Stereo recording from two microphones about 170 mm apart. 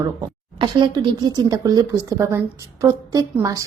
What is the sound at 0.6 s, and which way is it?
A woman's voice, 25° right (ahead or behind).